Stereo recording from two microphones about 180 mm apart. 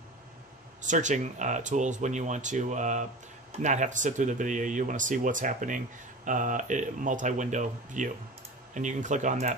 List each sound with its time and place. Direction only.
0.8 s speech: 45° right (ahead or behind)